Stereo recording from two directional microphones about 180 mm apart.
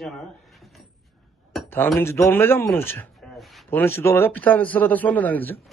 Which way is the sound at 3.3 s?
Centre (ahead or behind).